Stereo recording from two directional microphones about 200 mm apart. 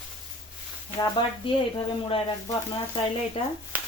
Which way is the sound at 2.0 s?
30° left (ahead or behind).